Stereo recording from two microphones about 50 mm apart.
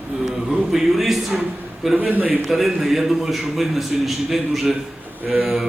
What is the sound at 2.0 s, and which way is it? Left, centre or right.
Speech, right.